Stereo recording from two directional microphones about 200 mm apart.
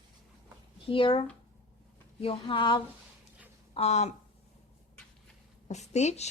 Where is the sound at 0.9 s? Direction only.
25° left (ahead or behind).